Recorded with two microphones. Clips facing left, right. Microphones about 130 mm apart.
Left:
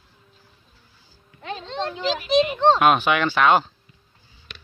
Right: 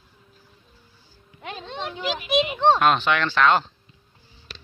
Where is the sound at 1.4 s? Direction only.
15° right (ahead or behind).